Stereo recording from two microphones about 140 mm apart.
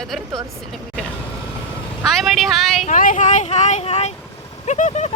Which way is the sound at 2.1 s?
Centre (ahead or behind).